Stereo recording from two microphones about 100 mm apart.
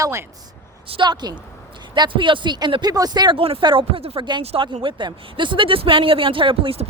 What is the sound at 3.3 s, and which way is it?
Speech, 70° right (ahead or behind).